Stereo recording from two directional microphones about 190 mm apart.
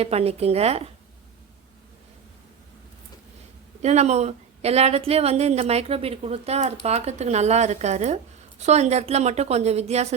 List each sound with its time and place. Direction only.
0.0 s a woman's voice: 30° right (ahead or behind)
3.8 s a woman's voice: 35° right (ahead or behind)